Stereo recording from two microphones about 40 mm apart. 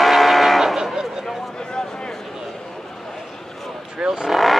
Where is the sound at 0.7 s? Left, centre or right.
Centre.